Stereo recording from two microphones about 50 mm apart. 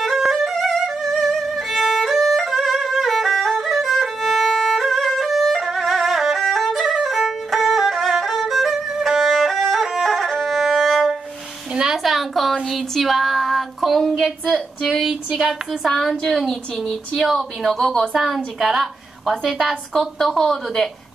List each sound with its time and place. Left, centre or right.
0.4 s violin: centre
11.7 s a sound: centre
12.0 s a sound: centre
12.6 s female singing: centre
14.8 s a woman's voice: centre
15.9 s a woman's voice: centre